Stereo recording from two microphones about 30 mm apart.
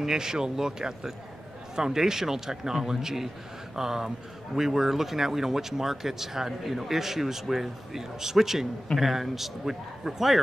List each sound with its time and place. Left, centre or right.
0.0 s a man's voice: centre